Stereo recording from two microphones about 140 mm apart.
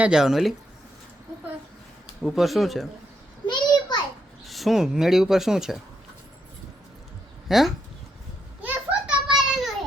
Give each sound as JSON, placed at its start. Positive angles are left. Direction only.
{"t": 0.0, "sound": "speech", "side_deg": -5}
{"t": 2.2, "sound": "speech", "side_deg": 0}
{"t": 3.4, "sound": "a sound", "side_deg": 30}
{"t": 4.4, "sound": "speech", "side_deg": 0}
{"t": 7.4, "sound": "speech", "side_deg": 0}
{"t": 8.6, "sound": "children playing", "side_deg": -10}